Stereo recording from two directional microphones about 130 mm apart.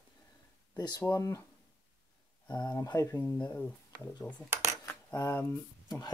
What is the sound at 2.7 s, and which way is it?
Speech, 25° left (ahead or behind).